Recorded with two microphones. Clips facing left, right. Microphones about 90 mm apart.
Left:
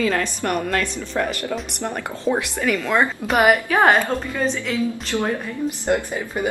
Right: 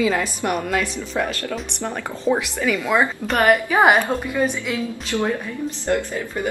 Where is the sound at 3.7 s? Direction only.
10° right (ahead or behind).